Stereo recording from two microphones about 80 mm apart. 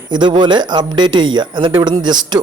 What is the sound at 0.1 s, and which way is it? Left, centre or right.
A man's voice, right.